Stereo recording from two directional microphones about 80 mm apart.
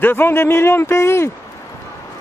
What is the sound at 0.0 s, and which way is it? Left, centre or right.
A man's voice, left.